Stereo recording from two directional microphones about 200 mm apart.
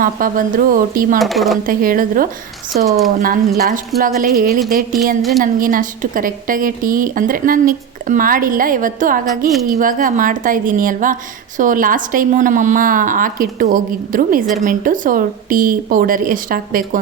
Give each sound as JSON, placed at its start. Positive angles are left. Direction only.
{"t": 0.0, "sound": "a woman's voice", "side_deg": -45}
{"t": 1.2, "sound": "speech", "side_deg": 0}
{"t": 1.6, "sound": "a woman's voice", "side_deg": -45}